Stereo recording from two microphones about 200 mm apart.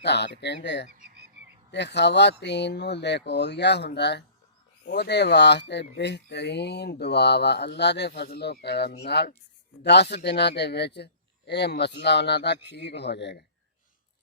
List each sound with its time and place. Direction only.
0.0 s speech: 55° left (ahead or behind)